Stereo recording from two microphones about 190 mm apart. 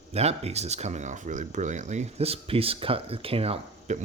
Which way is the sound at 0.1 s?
35° right (ahead or behind).